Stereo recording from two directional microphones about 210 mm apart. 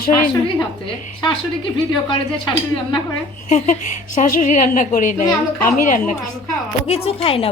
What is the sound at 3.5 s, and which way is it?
A woman's voice, 35° left (ahead or behind).